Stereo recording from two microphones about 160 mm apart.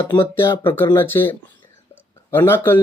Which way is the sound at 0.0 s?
30° left (ahead or behind).